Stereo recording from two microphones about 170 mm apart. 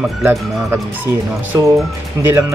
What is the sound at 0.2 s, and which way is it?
Speech, 15° right (ahead or behind).